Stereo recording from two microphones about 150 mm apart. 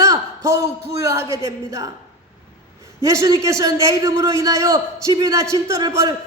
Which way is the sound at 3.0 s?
25° right (ahead or behind).